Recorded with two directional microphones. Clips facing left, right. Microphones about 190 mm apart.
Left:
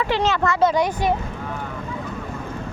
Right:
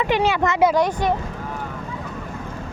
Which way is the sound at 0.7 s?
Centre (ahead or behind).